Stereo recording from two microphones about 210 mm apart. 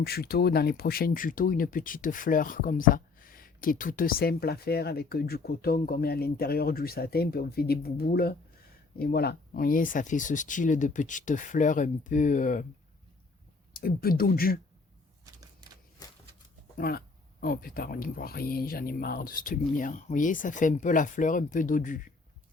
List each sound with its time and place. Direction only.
0.0 s speech: 50° left (ahead or behind)
13.8 s speech: 45° left (ahead or behind)
16.7 s speech: 45° left (ahead or behind)